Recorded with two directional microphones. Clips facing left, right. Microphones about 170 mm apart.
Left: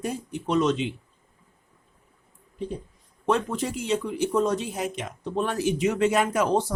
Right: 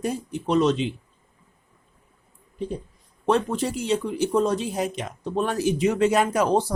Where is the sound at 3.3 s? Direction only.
35° right (ahead or behind).